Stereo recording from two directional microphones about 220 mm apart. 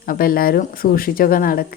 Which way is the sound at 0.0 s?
40° left (ahead or behind).